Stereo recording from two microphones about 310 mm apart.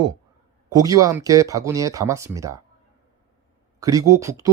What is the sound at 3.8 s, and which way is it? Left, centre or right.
Speech, centre.